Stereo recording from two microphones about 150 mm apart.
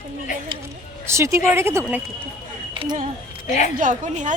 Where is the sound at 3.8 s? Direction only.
55° right (ahead or behind).